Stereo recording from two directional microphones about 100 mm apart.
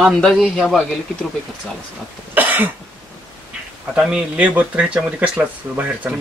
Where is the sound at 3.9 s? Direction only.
10° right (ahead or behind).